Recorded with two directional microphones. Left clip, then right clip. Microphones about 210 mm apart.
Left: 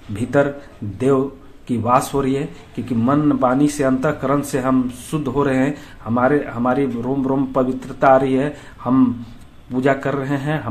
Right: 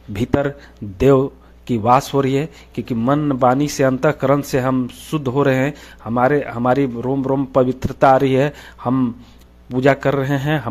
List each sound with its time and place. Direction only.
0.1 s speech: 45° right (ahead or behind)